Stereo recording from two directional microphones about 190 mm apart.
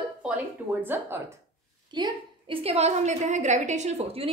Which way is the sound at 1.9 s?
25° right (ahead or behind).